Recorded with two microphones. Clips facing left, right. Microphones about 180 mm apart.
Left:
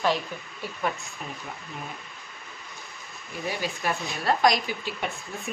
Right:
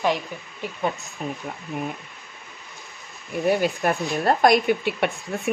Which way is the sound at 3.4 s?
55° right (ahead or behind).